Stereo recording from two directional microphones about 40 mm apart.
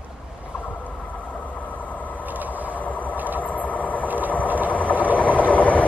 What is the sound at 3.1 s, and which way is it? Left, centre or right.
Vehicle, right.